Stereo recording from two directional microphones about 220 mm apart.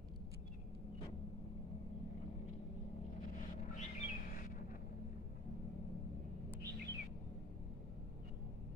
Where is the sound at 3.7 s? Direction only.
35° left (ahead or behind).